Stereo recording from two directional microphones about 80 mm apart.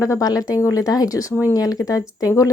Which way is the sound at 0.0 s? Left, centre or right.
Left.